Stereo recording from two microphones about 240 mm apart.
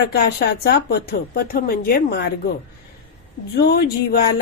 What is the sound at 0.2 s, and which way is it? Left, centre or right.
A woman's voice, left.